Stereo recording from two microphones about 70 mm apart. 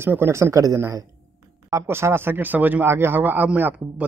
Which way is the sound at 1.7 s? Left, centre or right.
Right.